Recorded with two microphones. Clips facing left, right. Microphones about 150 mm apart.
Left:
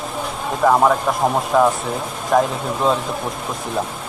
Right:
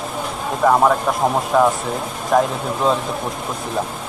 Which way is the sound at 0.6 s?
Centre (ahead or behind).